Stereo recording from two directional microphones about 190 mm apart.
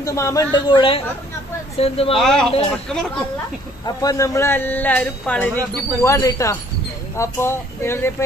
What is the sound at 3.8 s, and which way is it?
Speech, 20° left (ahead or behind).